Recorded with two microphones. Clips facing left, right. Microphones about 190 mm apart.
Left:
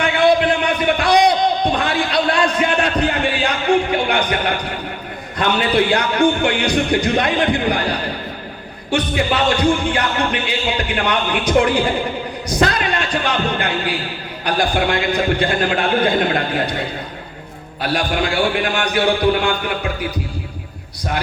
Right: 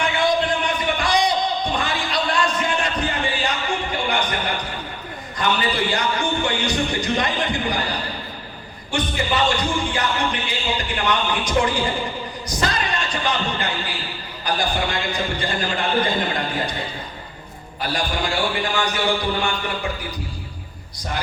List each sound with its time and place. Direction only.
0.0 s a sound: 65° left (ahead or behind)
5.4 s music: 65° left (ahead or behind)
9.1 s music: 65° left (ahead or behind)
17.8 s music: 65° left (ahead or behind)